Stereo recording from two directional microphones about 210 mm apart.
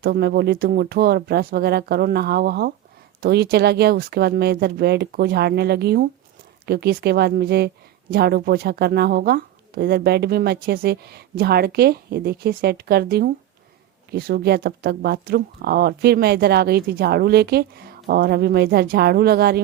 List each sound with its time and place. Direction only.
0.0 s speech: 50° right (ahead or behind)